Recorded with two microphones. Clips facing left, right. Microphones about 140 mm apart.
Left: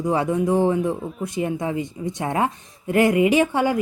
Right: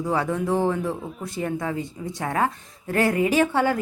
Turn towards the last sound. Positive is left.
turn(degrees=15)  # may be behind; listen again after turning